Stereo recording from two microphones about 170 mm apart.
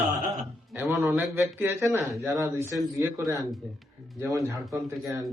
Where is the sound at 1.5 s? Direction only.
15° right (ahead or behind).